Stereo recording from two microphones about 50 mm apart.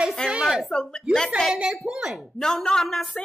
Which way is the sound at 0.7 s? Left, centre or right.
Centre.